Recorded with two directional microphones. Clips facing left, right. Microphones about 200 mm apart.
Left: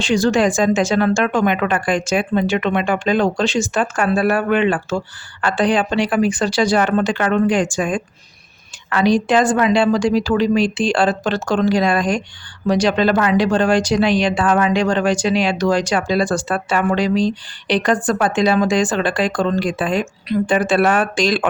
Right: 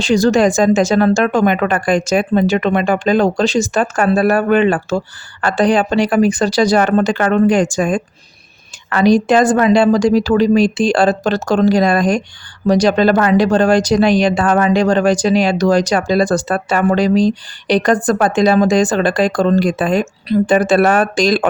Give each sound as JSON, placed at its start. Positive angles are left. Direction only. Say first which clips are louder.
{"t": 0.0, "sound": "speech", "louder": "right 4 dB", "side_deg": -40}